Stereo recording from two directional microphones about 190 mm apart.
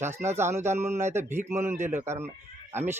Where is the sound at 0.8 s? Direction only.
35° right (ahead or behind).